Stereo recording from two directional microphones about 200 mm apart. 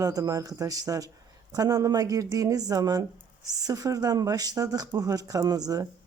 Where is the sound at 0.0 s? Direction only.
15° right (ahead or behind).